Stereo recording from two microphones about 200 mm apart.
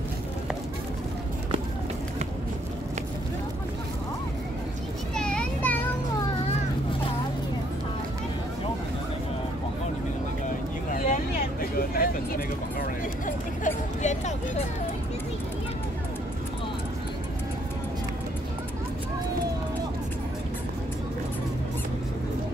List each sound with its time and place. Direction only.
5.1 s children playing: 5° left (ahead or behind)
10.9 s vehicle: 45° left (ahead or behind)
13.7 s hubbub: 35° left (ahead or behind)